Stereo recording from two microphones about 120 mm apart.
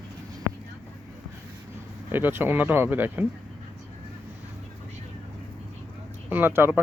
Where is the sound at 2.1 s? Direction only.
15° right (ahead or behind).